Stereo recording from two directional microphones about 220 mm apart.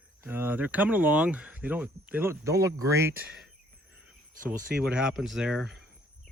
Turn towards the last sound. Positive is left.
turn(degrees=0)  # may be behind; listen again after turning